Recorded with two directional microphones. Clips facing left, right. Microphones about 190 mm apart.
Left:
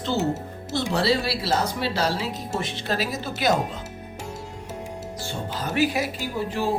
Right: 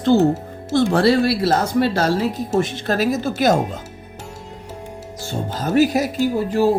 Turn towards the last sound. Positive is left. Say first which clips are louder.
# right 9 dB
turn(degrees=-40)  # may be behind; listen again after turning